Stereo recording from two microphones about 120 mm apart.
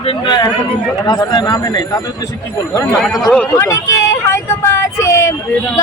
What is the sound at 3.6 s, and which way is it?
Speech, 25° left (ahead or behind).